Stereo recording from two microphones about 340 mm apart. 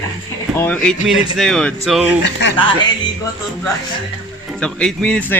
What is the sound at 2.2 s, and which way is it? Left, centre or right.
Speech, left.